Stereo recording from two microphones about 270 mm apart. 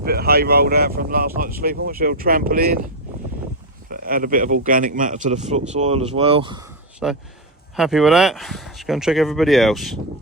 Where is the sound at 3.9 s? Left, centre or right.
Right; by 6.8 s centre.